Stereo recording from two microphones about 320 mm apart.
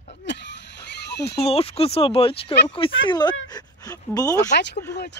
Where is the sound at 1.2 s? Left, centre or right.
Centre.